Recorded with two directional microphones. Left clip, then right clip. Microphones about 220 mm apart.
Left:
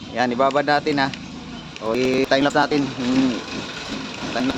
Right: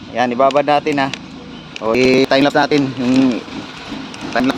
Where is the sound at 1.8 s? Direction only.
30° right (ahead or behind).